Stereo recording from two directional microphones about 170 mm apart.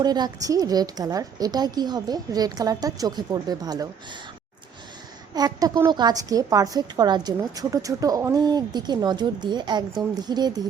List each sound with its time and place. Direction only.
0.0 s a woman's voice: 25° right (ahead or behind)
5.3 s a woman's voice: 25° right (ahead or behind)